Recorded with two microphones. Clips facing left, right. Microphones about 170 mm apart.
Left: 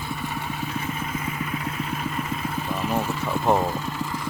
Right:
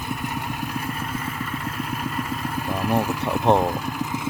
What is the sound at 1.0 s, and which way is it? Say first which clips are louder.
Vehicle: even; 10° left (ahead or behind).